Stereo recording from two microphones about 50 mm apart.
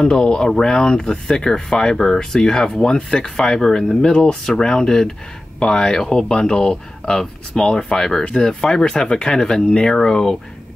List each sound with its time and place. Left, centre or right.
0.0 s speech: centre